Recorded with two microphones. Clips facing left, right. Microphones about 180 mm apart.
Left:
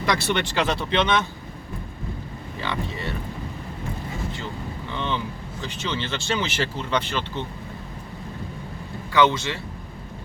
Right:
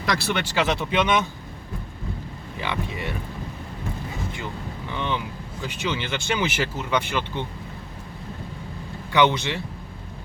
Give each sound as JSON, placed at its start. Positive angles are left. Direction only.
{"t": 0.0, "sound": "speech", "side_deg": 0}
{"t": 2.6, "sound": "speech", "side_deg": -15}
{"t": 4.9, "sound": "vehicle", "side_deg": -15}
{"t": 5.6, "sound": "speech", "side_deg": -10}
{"t": 9.1, "sound": "speech", "side_deg": -20}